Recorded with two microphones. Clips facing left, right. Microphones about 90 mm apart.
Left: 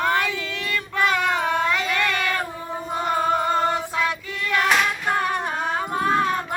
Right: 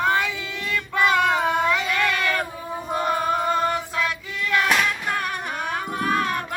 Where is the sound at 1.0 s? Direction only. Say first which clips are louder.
Right 2 dB; centre (ahead or behind).